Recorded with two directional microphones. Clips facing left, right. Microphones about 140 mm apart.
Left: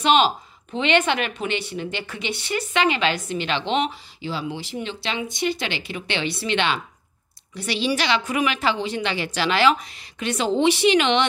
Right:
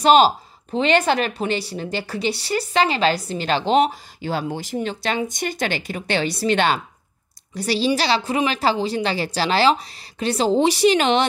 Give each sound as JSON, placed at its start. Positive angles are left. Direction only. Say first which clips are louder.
{"t": 0.0, "sound": "speech", "louder": "right 4 dB", "side_deg": -40}